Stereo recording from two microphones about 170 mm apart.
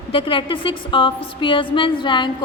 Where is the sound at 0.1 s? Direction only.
30° left (ahead or behind).